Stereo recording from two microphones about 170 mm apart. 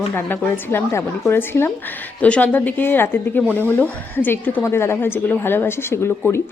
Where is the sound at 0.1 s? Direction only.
10° left (ahead or behind).